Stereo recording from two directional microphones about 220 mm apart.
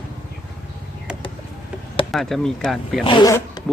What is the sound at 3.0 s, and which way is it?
Speech, 20° left (ahead or behind).